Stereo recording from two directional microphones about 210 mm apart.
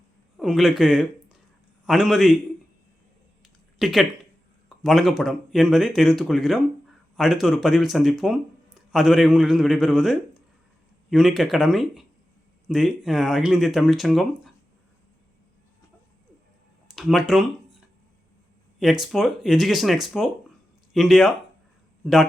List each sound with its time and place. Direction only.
0.3 s a man's voice: centre (ahead or behind)
3.8 s a man's voice: centre (ahead or behind)
16.9 s speech: centre (ahead or behind)
18.8 s a man's voice: centre (ahead or behind)